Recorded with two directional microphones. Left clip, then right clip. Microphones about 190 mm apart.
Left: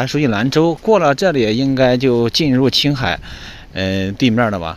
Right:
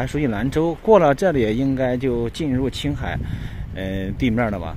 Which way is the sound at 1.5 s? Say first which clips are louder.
Left 7 dB; 25° left (ahead or behind).